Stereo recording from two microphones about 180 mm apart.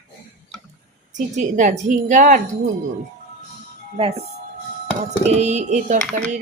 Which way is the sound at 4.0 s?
35° right (ahead or behind).